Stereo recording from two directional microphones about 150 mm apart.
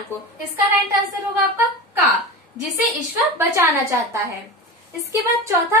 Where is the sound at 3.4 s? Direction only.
20° right (ahead or behind).